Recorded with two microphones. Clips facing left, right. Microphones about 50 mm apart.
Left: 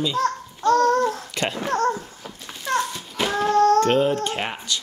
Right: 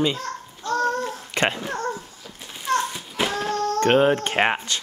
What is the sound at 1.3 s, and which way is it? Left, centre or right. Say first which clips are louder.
Babbling: right 3 dB; right.